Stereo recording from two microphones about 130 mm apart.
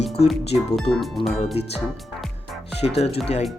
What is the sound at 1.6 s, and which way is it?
Speech, 50° left (ahead or behind).